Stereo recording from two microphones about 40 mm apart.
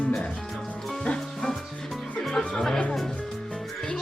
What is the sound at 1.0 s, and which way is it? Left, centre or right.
Speech, left.